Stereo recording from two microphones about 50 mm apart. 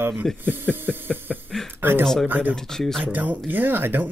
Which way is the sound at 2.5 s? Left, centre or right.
Centre.